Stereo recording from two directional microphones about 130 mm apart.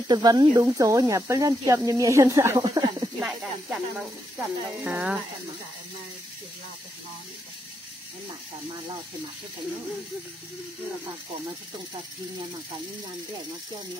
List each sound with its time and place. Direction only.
0.1 s speech: 30° right (ahead or behind)
2.6 s snake: 35° right (ahead or behind)
3.2 s speech: centre (ahead or behind)